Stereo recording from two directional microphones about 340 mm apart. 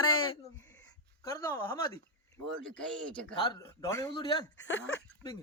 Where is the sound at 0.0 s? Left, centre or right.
Left.